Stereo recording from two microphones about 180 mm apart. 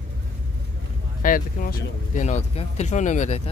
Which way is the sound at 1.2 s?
50° left (ahead or behind).